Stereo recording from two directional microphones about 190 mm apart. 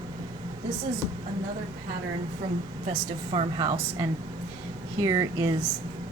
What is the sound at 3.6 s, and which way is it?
Speech, 20° right (ahead or behind).